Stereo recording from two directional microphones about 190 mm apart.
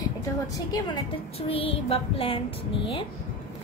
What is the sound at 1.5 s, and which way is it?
Speech, 30° left (ahead or behind).